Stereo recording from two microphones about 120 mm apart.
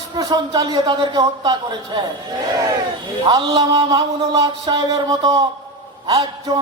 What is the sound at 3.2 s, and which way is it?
A man's voice, 40° right (ahead or behind).